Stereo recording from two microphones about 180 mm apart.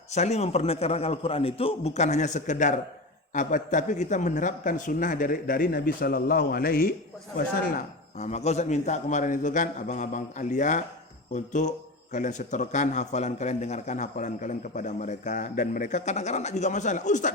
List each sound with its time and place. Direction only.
0.1 s a man's voice: 40° left (ahead or behind); by 6.9 s 55° left (ahead or behind)
8.2 s a man's voice: 40° left (ahead or behind)